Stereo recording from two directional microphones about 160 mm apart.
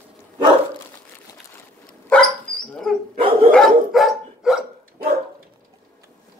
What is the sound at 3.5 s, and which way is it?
Dog, centre (ahead or behind).